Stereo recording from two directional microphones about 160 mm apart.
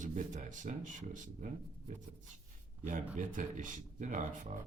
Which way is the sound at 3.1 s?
50° right (ahead or behind).